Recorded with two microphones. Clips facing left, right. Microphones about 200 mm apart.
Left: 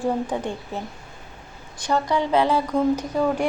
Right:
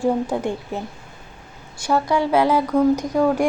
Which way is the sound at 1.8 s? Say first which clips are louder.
Right 3 dB; 10° right (ahead or behind).